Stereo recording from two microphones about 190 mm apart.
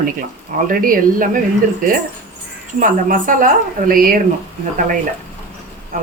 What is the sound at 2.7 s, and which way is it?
Speech, 45° right (ahead or behind).